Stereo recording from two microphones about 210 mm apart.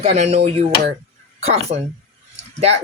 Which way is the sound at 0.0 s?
30° right (ahead or behind).